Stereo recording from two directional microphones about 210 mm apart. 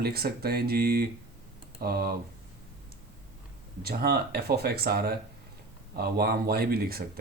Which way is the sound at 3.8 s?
45° right (ahead or behind).